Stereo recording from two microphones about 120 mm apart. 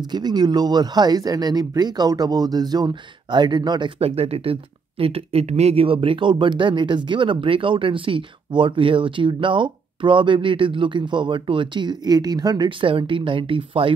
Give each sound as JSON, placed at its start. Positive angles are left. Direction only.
{"t": 0.1, "sound": "speech", "side_deg": -35}
{"t": 4.0, "sound": "speech", "side_deg": -55}